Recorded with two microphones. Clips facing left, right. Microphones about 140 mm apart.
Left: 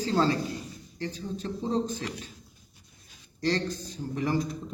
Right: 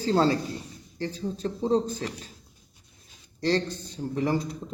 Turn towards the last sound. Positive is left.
turn(degrees=-30)  # may be behind; listen again after turning